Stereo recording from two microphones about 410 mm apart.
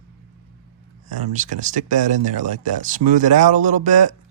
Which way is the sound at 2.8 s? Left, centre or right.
Centre.